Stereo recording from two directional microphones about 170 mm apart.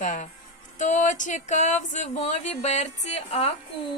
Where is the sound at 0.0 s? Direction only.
50° left (ahead or behind).